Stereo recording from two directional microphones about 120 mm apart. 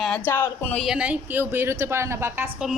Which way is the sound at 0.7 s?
5° right (ahead or behind).